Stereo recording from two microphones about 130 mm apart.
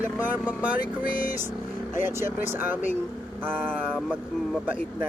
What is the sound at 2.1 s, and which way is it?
Speech, 20° right (ahead or behind).